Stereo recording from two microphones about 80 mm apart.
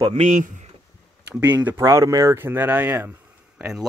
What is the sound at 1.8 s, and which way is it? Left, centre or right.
Speech, right.